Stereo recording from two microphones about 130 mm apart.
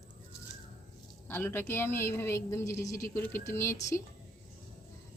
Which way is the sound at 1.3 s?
15° left (ahead or behind).